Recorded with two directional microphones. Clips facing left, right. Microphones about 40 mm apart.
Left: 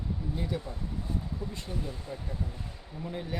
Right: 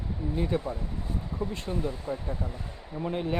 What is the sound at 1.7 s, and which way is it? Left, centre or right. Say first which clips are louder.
Speech: right 7 dB; right.